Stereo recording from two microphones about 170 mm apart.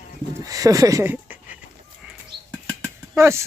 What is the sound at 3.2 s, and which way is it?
Speech, 15° right (ahead or behind).